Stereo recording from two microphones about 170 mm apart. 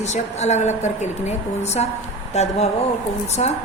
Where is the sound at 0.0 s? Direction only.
40° left (ahead or behind).